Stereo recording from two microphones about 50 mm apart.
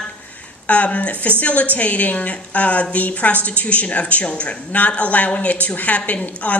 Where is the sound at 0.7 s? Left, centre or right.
Left.